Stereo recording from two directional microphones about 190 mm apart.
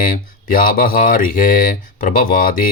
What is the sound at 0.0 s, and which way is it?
Speech, 45° left (ahead or behind).